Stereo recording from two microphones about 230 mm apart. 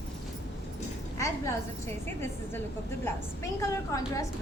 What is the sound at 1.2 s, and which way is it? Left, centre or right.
A woman's voice, centre.